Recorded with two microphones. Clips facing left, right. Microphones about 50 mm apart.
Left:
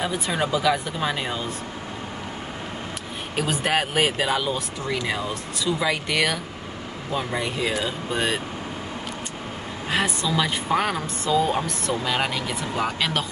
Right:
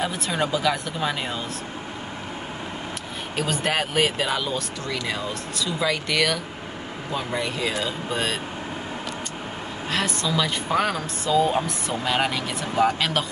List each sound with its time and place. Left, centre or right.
0.3 s speech: centre
3.3 s speech: centre
9.8 s speech: centre
11.2 s speech: centre